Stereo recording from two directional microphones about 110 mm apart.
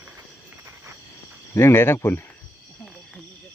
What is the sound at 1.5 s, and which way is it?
Speech, 20° left (ahead or behind).